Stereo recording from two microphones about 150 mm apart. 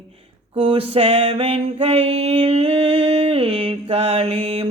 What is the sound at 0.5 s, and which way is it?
Mantra, 40° right (ahead or behind).